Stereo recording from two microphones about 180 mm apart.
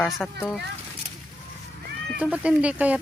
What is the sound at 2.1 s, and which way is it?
Speech, 5° right (ahead or behind).